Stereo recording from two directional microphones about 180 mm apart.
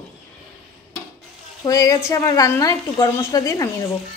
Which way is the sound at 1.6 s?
20° left (ahead or behind).